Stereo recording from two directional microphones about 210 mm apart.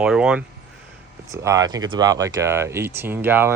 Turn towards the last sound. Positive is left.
turn(degrees=-10)  # may be behind; listen again after turning